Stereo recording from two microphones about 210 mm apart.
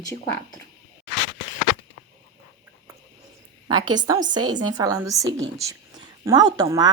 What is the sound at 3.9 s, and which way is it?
Speech, 15° right (ahead or behind).